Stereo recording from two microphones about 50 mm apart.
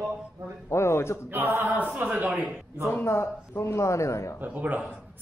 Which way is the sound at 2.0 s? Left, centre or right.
Right.